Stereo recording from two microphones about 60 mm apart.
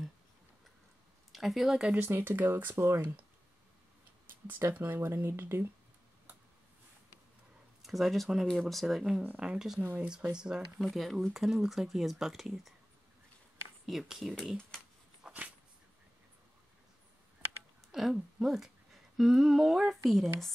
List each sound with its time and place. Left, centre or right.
1.3 s speech: centre
2.0 s speech: right
4.3 s speech: right
7.8 s speech: centre
9.4 s speech: centre
10.8 s speech: centre
13.8 s speech: centre
15.2 s dog: centre
17.9 s speech: centre